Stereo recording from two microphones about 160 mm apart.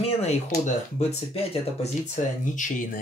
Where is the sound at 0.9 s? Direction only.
40° left (ahead or behind).